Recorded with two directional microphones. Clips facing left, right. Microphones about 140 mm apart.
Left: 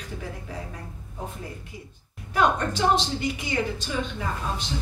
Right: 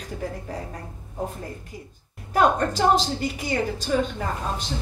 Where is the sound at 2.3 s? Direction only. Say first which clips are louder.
Right 3 dB; 40° right (ahead or behind).